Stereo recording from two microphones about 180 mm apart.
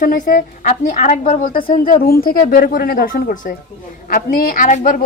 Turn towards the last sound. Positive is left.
turn(degrees=45)  # may be behind; listen again after turning